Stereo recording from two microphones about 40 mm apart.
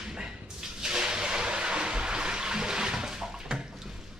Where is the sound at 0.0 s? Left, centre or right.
Centre.